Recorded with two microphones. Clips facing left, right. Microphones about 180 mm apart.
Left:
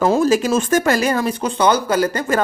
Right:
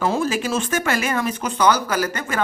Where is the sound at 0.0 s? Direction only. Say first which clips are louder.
Left 6 dB; 40° left (ahead or behind).